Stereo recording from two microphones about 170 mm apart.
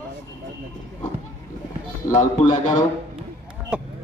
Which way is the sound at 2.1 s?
45° left (ahead or behind).